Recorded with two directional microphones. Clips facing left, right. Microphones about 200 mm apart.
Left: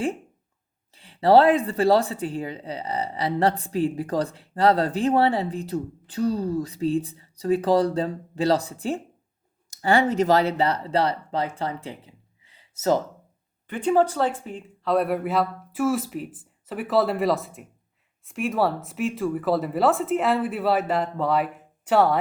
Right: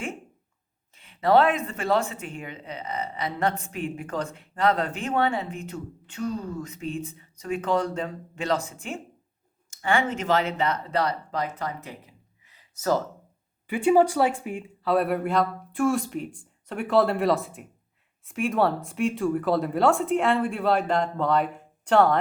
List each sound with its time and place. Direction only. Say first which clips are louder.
0.9 s speech: left 4 dB; 35° left (ahead or behind)
13.7 s speech: right 1 dB; 10° right (ahead or behind)